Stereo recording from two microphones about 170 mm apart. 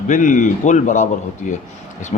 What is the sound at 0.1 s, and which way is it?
Speech, 50° left (ahead or behind).